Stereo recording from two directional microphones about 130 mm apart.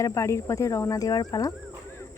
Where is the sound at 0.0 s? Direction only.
25° left (ahead or behind).